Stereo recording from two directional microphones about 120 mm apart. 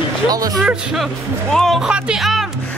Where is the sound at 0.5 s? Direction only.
Centre (ahead or behind).